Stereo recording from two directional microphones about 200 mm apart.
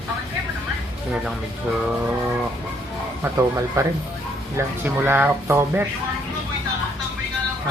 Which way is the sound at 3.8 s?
15° right (ahead or behind).